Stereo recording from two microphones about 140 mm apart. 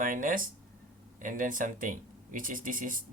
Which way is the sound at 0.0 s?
70° right (ahead or behind).